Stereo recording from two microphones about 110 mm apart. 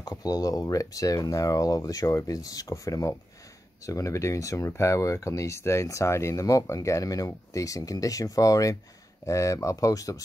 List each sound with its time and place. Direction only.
0.0 s speech: 35° left (ahead or behind)